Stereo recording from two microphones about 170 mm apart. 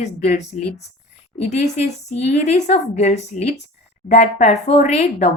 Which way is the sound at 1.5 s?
40° left (ahead or behind).